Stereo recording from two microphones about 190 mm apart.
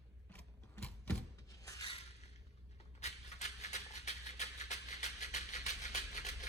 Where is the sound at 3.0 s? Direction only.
35° left (ahead or behind).